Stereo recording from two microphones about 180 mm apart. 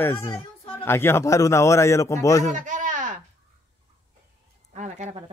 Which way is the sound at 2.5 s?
45° right (ahead or behind).